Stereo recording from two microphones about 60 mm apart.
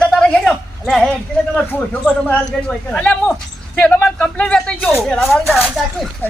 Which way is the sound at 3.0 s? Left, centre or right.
Left.